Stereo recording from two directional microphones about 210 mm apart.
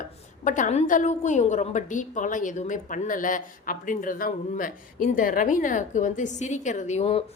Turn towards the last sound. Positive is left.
turn(degrees=30)  # may be behind; listen again after turning